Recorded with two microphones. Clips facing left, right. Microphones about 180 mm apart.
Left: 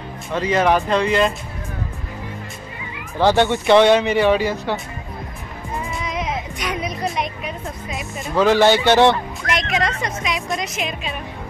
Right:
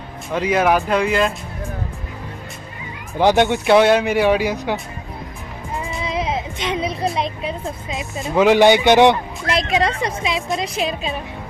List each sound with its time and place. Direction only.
0.3 s speech: 10° right (ahead or behind)
3.2 s speech: 15° right (ahead or behind)
6.0 s music: 30° right (ahead or behind)
9.5 s a woman's voice: 30° right (ahead or behind)